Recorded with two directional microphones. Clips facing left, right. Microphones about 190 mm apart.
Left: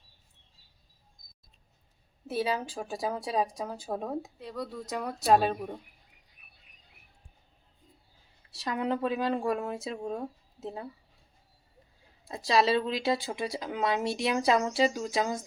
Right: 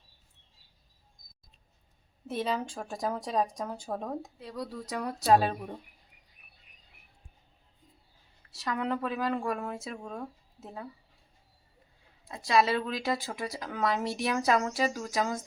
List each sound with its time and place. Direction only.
2.2 s speech: 5° left (ahead or behind)
8.6 s speech: 25° left (ahead or behind)
12.3 s speech: 30° left (ahead or behind)